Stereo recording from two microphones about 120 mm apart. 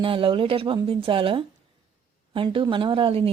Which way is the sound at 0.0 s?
45° right (ahead or behind).